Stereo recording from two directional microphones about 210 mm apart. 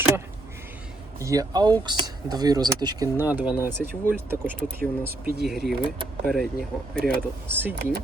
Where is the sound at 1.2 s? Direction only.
15° right (ahead or behind).